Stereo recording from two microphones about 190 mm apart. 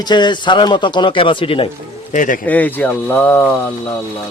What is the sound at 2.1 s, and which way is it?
Speech, 40° left (ahead or behind).